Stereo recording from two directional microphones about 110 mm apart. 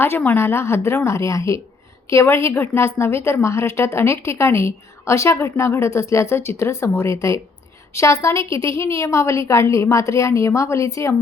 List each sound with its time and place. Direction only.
0.0 s a woman's voice: 20° left (ahead or behind)